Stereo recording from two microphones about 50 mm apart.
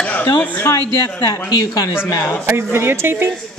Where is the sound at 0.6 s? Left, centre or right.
Left.